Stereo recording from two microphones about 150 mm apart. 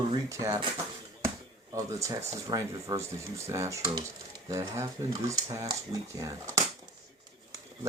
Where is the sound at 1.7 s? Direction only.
20° right (ahead or behind).